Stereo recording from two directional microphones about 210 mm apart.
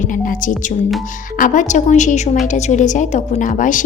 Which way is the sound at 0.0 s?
40° left (ahead or behind).